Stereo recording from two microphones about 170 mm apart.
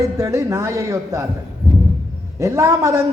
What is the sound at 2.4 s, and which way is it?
Speech, 15° right (ahead or behind).